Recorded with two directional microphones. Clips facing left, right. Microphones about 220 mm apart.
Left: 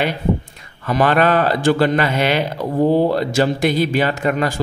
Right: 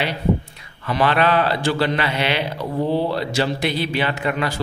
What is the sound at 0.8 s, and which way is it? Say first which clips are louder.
Speech: left 3 dB; 45° left (ahead or behind).